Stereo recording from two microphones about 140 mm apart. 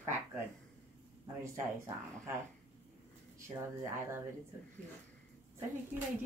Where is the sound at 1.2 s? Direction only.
20° right (ahead or behind).